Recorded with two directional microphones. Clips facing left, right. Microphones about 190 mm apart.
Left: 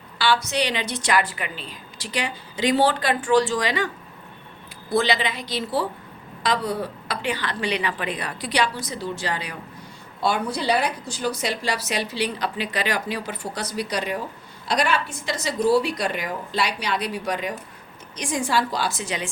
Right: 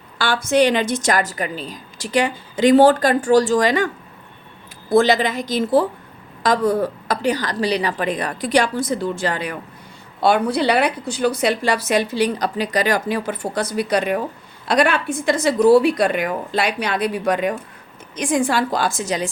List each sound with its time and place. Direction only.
0.2 s a woman's voice: 50° right (ahead or behind)
4.9 s a woman's voice: 45° right (ahead or behind)
10.2 s a woman's voice: 65° right (ahead or behind); by 19.3 s 40° right (ahead or behind)